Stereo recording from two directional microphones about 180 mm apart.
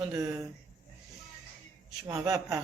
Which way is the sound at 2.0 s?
20° right (ahead or behind).